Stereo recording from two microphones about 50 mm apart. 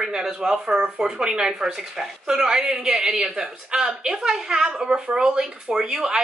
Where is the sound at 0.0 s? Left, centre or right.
Centre.